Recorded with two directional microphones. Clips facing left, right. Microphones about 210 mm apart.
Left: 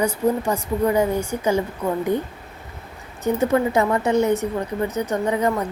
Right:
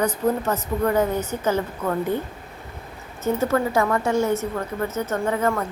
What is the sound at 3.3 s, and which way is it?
Speech, 20° left (ahead or behind).